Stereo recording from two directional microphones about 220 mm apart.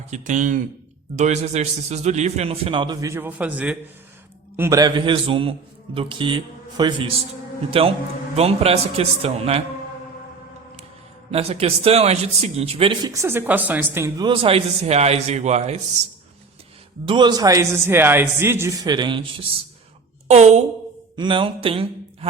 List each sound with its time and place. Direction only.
0.1 s a man's voice: 35° right (ahead or behind)
11.3 s a man's voice: 25° right (ahead or behind)
17.1 s a man's voice: 20° right (ahead or behind)